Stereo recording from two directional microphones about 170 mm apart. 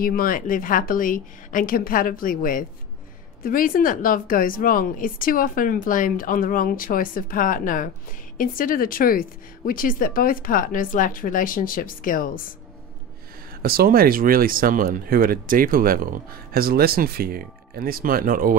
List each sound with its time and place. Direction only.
0.0 s speech: 55° left (ahead or behind)
13.6 s speech: 60° right (ahead or behind)